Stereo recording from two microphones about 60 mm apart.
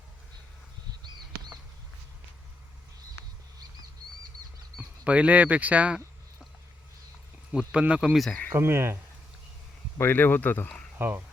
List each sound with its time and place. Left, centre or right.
4.8 s speech: right
7.7 s speech: right
8.0 s speech: centre
8.5 s speech: right
10.0 s speech: left
10.9 s speech: right